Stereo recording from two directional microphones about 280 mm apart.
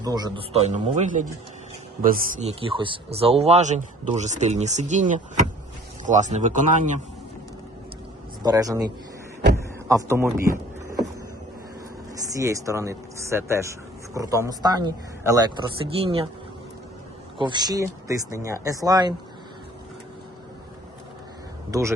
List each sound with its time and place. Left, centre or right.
0.0 s a man's voice: centre
8.4 s speech: centre
9.9 s speech: centre
12.3 s speech: centre
17.3 s speech: centre
21.7 s speech: centre